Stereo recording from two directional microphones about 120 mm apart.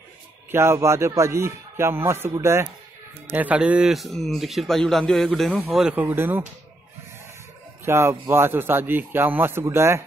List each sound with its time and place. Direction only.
0.5 s speech: 20° right (ahead or behind)
3.3 s speech: 10° right (ahead or behind)
7.8 s speech: 20° right (ahead or behind)